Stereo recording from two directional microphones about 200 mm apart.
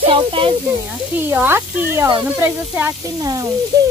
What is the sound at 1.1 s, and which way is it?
Speech, 10° right (ahead or behind).